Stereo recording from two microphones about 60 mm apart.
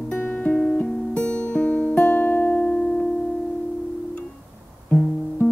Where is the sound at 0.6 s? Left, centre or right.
Centre.